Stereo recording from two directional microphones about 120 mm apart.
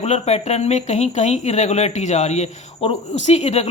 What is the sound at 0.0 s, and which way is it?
Speech, 65° left (ahead or behind).